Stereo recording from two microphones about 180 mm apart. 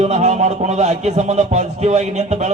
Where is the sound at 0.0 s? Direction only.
40° right (ahead or behind).